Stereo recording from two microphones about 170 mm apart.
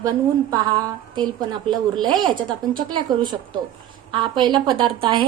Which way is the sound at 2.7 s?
25° right (ahead or behind).